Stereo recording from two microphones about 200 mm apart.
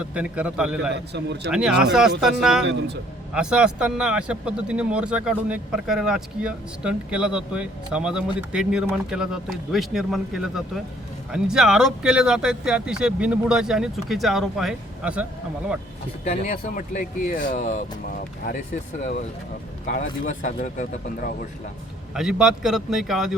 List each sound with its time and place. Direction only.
0.0 s speech: 5° right (ahead or behind)
1.1 s speech: 60° right (ahead or behind)
1.5 s speech: 5° right (ahead or behind)
2.6 s speech: 60° right (ahead or behind)
3.3 s speech: 5° right (ahead or behind)
16.2 s speech: 35° left (ahead or behind)
19.8 s speech: 40° left (ahead or behind)
22.1 s speech: centre (ahead or behind)